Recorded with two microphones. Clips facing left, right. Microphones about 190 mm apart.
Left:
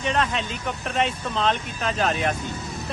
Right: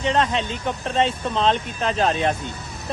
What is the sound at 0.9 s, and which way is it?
Speech, 25° right (ahead or behind).